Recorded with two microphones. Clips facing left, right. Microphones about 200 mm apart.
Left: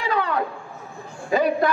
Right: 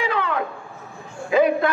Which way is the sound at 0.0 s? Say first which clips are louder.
Even; 40° left (ahead or behind).